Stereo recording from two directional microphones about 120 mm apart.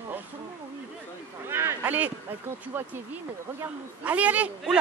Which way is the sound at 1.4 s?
20° right (ahead or behind).